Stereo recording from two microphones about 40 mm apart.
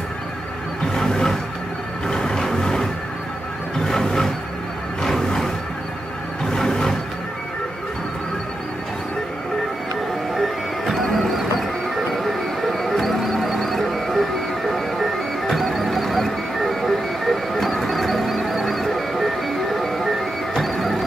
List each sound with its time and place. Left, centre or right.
0.9 s a sound: centre
2.0 s music: centre
3.8 s a sound: centre
5.0 s music: centre
6.5 s music: centre
10.3 s music: centre